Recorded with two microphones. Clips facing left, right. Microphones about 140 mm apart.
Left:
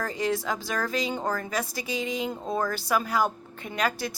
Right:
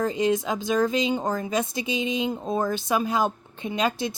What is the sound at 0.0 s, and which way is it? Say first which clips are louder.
Speech: right 5 dB; 20° right (ahead or behind).